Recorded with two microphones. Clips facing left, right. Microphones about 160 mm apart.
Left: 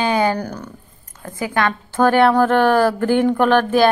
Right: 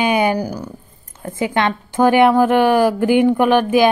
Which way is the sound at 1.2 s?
20° right (ahead or behind).